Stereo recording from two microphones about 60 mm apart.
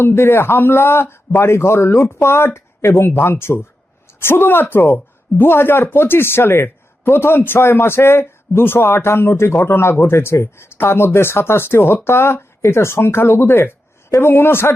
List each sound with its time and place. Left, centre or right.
0.0 s a man's voice: left